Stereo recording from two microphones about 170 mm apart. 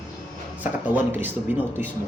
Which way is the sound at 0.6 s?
10° right (ahead or behind).